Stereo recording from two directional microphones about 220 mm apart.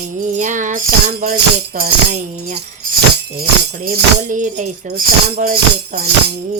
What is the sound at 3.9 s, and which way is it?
Music, 35° right (ahead or behind).